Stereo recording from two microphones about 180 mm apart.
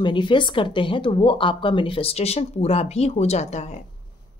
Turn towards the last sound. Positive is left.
turn(degrees=40)  # may be behind; listen again after turning